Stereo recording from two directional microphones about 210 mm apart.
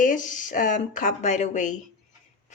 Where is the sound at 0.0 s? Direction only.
40° left (ahead or behind).